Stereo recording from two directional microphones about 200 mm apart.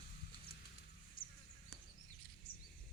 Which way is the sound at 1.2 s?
45° left (ahead or behind).